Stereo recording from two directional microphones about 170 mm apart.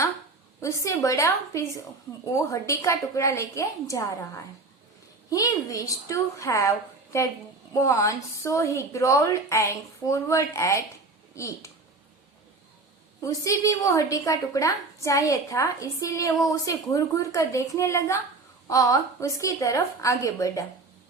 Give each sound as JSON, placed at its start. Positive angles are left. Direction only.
{"t": 0.6, "sound": "a woman's voice", "side_deg": 20}
{"t": 5.3, "sound": "a woman's voice", "side_deg": 20}
{"t": 13.2, "sound": "a woman's voice", "side_deg": 20}